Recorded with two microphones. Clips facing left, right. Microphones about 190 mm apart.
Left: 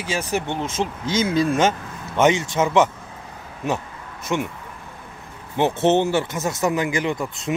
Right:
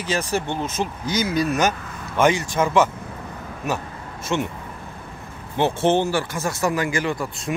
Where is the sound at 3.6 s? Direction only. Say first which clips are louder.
Left 2 dB; 20° left (ahead or behind).